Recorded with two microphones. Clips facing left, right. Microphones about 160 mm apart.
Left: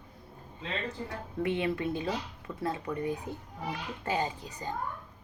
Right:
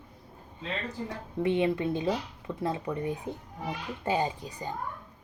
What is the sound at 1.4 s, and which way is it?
Speech, 20° right (ahead or behind).